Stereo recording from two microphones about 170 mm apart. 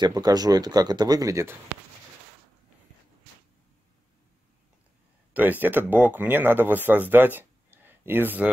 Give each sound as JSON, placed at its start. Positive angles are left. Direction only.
{"t": 0.0, "sound": "speech", "side_deg": -25}
{"t": 5.3, "sound": "speech", "side_deg": -10}